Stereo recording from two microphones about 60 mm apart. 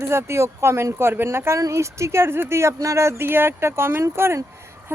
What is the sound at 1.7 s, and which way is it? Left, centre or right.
Speech, right.